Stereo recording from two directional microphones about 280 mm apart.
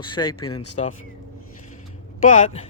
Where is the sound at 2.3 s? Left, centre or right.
Left.